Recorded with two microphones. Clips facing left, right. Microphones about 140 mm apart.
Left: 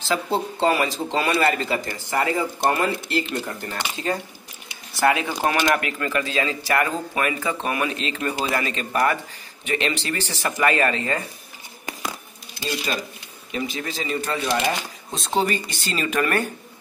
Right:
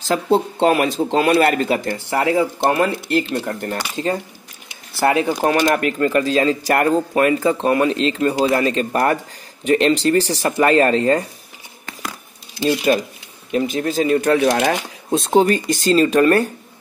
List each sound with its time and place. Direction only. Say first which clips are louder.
0.0 s a man's voice: right 6 dB; 50° right (ahead or behind)
5.1 s speech: right 6 dB; 35° right (ahead or behind)
12.6 s a man's voice: right 10 dB; 55° right (ahead or behind); by 14.8 s 80° right
15.0 s speech: right 9 dB; 50° right (ahead or behind); by 16.4 s 35° right (ahead or behind)